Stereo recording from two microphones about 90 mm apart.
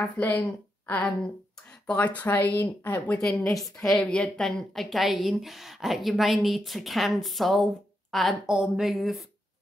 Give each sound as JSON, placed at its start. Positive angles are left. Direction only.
{"t": 0.2, "sound": "speech", "side_deg": 20}
{"t": 3.3, "sound": "speech", "side_deg": 5}